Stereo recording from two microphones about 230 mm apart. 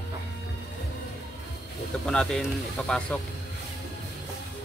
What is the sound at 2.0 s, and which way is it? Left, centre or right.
A man's voice, centre.